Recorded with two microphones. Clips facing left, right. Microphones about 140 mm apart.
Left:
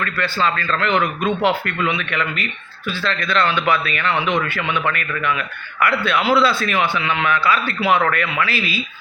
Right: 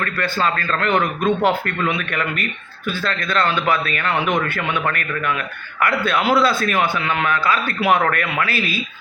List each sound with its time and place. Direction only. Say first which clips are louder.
0.0 s speech: even; 45° right (ahead or behind)